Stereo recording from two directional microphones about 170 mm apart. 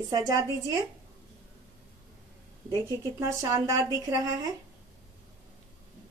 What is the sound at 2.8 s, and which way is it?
A woman's voice, 15° right (ahead or behind).